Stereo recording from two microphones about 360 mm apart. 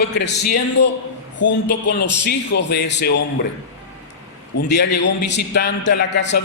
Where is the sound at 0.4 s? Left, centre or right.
Left.